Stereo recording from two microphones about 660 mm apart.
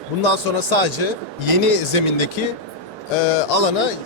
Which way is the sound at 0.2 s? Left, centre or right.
Left.